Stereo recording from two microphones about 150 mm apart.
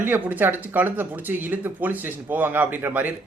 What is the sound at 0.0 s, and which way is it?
Speech, 10° right (ahead or behind).